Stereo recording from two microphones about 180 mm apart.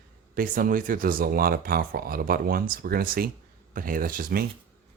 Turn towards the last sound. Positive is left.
turn(degrees=-55)  # may be behind; listen again after turning